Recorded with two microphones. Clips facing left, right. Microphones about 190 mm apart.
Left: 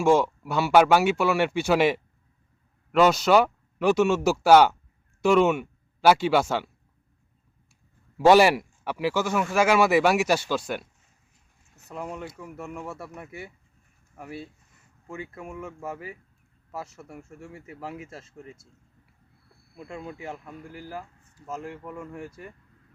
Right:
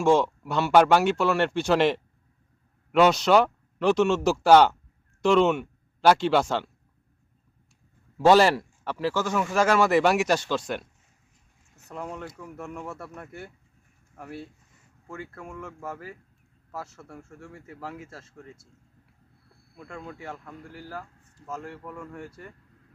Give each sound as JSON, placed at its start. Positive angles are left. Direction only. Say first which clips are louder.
{"t": 0.0, "sound": "speech", "louder": "even", "side_deg": 5}
{"t": 8.3, "sound": "speech", "louder": "left 1 dB", "side_deg": 10}
{"t": 11.9, "sound": "speech", "louder": "left 1 dB", "side_deg": 10}
{"t": 19.7, "sound": "speech", "louder": "left 2 dB", "side_deg": 10}